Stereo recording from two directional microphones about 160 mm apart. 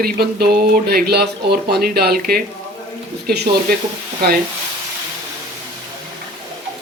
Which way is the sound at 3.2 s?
80° right.